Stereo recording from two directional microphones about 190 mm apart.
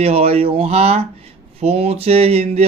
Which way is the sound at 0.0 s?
30° right (ahead or behind).